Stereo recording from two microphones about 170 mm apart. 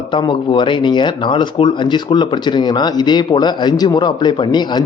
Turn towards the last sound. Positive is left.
turn(degrees=25)  # may be behind; listen again after turning